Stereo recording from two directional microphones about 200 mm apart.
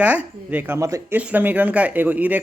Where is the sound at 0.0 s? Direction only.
5° right (ahead or behind).